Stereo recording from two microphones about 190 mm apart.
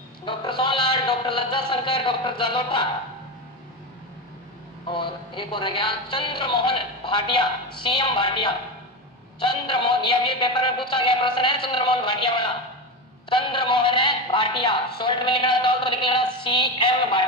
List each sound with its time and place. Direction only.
0.2 s music: 25° left (ahead or behind)
4.8 s speech: 25° left (ahead or behind)